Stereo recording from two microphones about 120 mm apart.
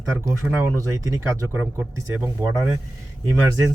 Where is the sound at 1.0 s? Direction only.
25° right (ahead or behind).